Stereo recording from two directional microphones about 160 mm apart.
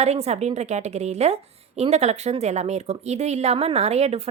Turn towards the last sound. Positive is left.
turn(degrees=-40)  # may be behind; listen again after turning